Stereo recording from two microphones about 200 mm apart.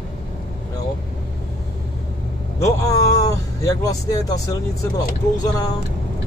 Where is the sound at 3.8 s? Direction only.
15° left (ahead or behind).